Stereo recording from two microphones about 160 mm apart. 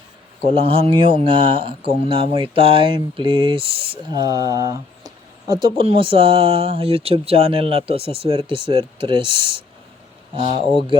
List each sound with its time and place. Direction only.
0.4 s speech: 35° right (ahead or behind)